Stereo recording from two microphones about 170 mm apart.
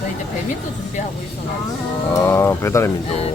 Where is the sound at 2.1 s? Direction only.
15° left (ahead or behind).